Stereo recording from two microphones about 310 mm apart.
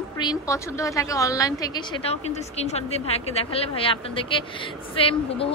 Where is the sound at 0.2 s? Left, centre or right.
Centre.